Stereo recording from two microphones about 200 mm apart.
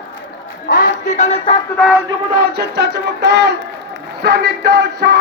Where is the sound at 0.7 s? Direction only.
45° left (ahead or behind).